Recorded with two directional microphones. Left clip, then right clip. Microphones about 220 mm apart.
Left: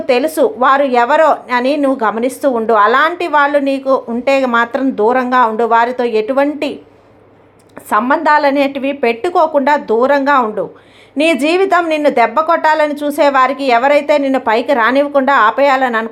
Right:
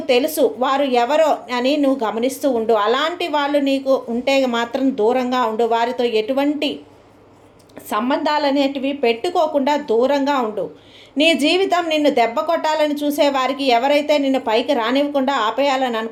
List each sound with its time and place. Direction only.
0.1 s a woman's voice: 15° left (ahead or behind)
7.9 s a woman's voice: 15° left (ahead or behind)